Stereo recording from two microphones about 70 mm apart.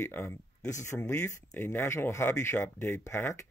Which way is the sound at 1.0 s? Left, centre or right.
Left.